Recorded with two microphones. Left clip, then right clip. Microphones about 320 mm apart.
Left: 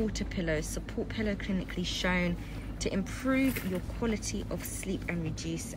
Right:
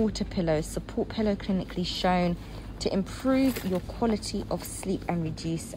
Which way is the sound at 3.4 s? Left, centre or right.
Right.